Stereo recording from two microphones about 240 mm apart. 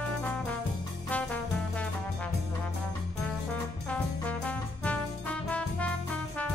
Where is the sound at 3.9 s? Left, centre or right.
Centre.